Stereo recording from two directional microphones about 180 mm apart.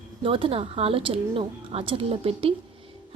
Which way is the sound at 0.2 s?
30° right (ahead or behind).